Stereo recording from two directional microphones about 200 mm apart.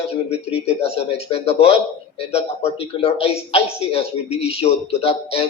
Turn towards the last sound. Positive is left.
turn(degrees=30)  # may be behind; listen again after turning